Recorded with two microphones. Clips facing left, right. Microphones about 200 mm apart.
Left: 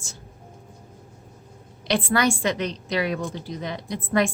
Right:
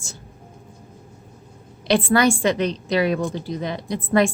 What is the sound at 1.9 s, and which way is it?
A woman's voice, 30° right (ahead or behind).